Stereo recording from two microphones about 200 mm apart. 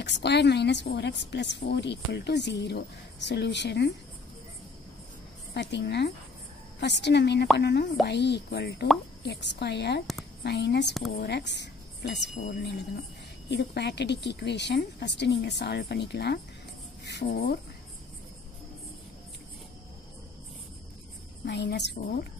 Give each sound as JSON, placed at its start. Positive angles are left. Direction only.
{"t": 0.0, "sound": "a woman's voice", "side_deg": 60}
{"t": 5.5, "sound": "a woman's voice", "side_deg": 60}
{"t": 13.5, "sound": "a woman's voice", "side_deg": 60}
{"t": 21.5, "sound": "a woman's voice", "side_deg": 60}